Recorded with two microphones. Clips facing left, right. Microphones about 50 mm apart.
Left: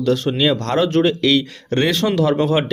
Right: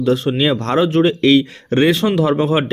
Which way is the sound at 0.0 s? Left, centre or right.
Centre.